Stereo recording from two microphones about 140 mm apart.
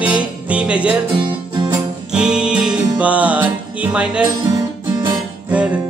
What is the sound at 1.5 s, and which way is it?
Music, 35° right (ahead or behind).